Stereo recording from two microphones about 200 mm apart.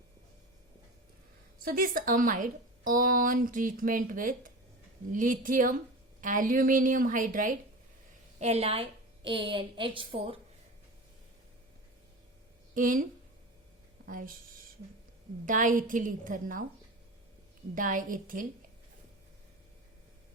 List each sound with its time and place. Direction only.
1.6 s a woman's voice: 45° right (ahead or behind); by 10.3 s 25° right (ahead or behind)
12.7 s a woman's voice: 40° right (ahead or behind)
14.1 s a woman's voice: 45° right (ahead or behind)
15.4 s a woman's voice: 40° right (ahead or behind)
17.7 s a woman's voice: 40° right (ahead or behind)